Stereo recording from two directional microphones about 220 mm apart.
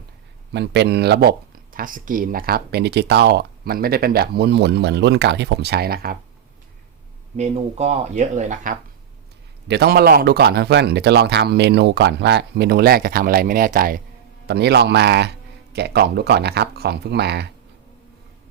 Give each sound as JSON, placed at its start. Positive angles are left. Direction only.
{"t": 0.5, "sound": "speech", "side_deg": -50}
{"t": 7.3, "sound": "speech", "side_deg": -30}
{"t": 9.6, "sound": "speech", "side_deg": -50}